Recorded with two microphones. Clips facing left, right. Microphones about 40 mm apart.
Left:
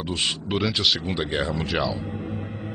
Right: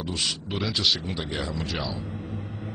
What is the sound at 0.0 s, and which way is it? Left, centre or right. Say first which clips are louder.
Speech: left 3 dB; left.